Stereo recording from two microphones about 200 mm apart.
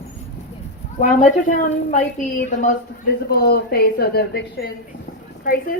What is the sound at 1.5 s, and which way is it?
A woman's voice, 40° left (ahead or behind).